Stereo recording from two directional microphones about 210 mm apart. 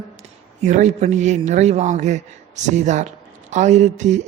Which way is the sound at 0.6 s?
35° right (ahead or behind).